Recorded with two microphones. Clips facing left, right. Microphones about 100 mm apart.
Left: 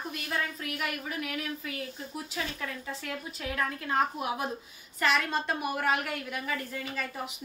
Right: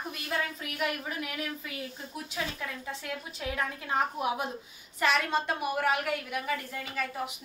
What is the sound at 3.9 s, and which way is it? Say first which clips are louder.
A woman's voice: even; 20° right (ahead or behind).